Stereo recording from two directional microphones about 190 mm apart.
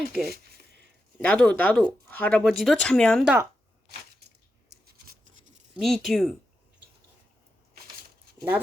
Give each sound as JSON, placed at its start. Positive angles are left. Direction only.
{"t": 0.2, "sound": "a sound", "side_deg": -55}
{"t": 1.2, "sound": "speech", "side_deg": 5}
{"t": 4.9, "sound": "scratch", "side_deg": -45}
{"t": 5.7, "sound": "speech", "side_deg": 0}